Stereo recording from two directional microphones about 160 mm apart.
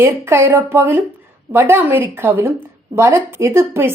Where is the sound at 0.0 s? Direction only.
15° right (ahead or behind).